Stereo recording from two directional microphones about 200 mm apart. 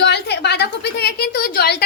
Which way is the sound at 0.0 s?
55° left (ahead or behind).